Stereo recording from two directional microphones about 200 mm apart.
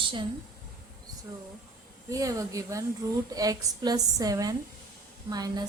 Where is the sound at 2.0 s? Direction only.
15° right (ahead or behind).